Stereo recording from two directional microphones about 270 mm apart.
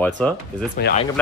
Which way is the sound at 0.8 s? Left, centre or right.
Left.